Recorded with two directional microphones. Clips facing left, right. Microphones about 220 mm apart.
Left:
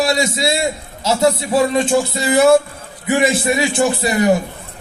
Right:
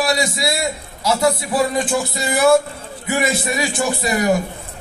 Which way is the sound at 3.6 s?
25° left (ahead or behind).